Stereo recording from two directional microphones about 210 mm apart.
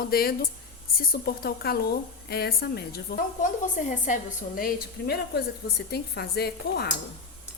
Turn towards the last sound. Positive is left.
turn(degrees=50)  # may be behind; listen again after turning